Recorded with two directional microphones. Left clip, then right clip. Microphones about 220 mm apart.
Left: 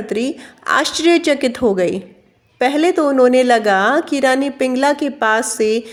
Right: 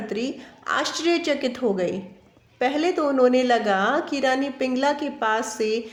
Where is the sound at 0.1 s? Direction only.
40° left (ahead or behind).